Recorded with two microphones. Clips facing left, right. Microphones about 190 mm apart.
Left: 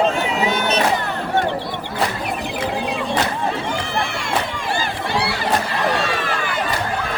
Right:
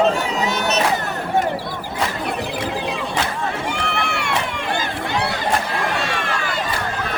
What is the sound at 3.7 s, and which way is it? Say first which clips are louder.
Run: even; 70° right (ahead or behind).